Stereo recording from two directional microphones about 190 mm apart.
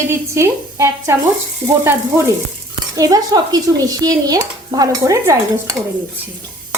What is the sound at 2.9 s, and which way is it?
A woman's voice, 20° right (ahead or behind).